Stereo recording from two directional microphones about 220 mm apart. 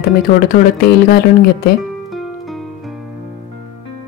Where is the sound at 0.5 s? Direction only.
45° left (ahead or behind).